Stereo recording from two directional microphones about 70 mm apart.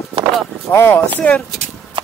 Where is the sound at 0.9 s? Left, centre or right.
Left.